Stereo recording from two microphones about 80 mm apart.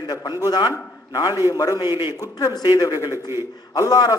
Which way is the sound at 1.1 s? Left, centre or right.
Left.